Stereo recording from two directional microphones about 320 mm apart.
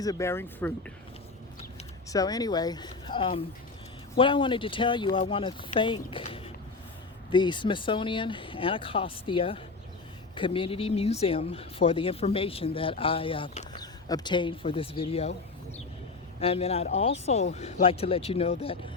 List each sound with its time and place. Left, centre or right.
0.0 s speech: centre
2.0 s speech: centre
16.4 s speech: centre